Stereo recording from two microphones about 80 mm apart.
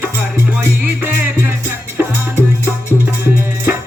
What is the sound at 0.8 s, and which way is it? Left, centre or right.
Music, right.